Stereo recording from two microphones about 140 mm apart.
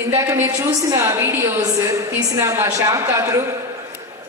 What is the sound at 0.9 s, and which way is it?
A woman's voice, 20° right (ahead or behind).